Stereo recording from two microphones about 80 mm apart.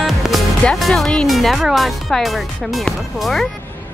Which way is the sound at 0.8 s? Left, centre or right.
Centre.